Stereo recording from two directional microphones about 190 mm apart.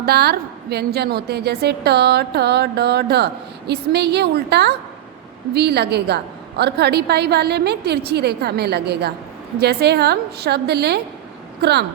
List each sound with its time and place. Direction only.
0.0 s a woman's voice: 55° right (ahead or behind)